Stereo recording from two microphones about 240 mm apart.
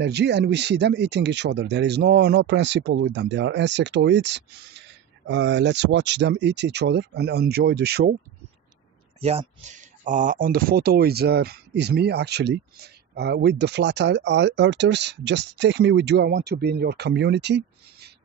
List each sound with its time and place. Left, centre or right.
0.0 s speech: right
9.2 s speech: right